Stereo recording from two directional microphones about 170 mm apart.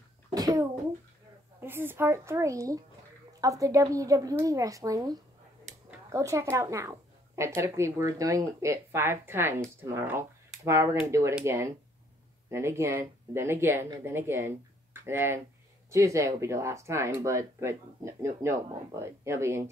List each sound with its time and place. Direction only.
0.3 s a child's voice: 20° right (ahead or behind)